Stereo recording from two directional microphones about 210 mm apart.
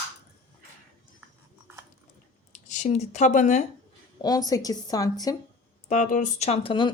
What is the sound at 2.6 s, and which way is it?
Speech, 35° left (ahead or behind).